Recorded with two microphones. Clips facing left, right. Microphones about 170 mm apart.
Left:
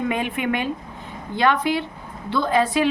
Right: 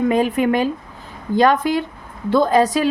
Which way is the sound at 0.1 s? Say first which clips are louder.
Right 7 dB; 40° right (ahead or behind).